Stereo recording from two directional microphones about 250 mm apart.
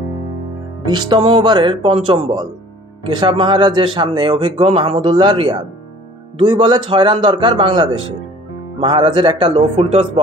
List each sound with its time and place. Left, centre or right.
0.8 s speech: centre